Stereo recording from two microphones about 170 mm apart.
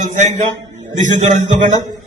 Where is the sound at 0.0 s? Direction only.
45° right (ahead or behind).